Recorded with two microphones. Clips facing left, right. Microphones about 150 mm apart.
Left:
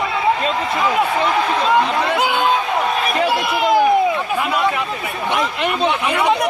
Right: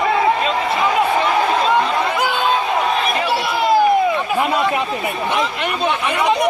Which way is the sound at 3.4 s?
20° left (ahead or behind).